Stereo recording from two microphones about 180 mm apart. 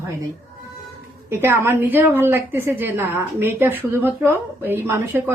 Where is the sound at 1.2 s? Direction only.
15° right (ahead or behind).